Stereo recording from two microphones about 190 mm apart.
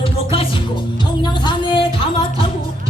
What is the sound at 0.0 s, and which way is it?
Music, 30° left (ahead or behind).